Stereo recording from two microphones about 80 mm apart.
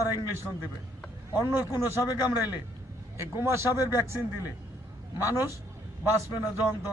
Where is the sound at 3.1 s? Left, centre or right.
Right.